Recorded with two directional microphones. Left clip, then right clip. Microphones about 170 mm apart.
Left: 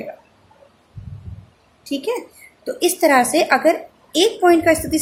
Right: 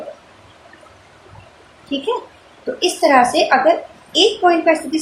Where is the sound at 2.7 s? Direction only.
55° left (ahead or behind).